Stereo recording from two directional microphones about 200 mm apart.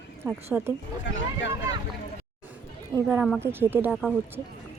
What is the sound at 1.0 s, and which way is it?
Speech, 65° left (ahead or behind).